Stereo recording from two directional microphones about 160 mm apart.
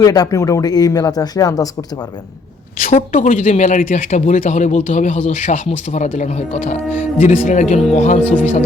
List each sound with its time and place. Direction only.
0.0 s speech: 25° left (ahead or behind)
2.8 s speech: 50° left (ahead or behind)